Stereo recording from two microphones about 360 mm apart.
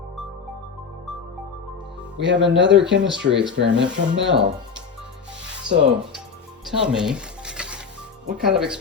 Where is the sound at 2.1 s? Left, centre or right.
Right.